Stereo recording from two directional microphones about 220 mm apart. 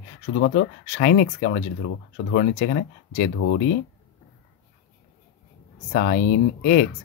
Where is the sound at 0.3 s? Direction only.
50° left (ahead or behind).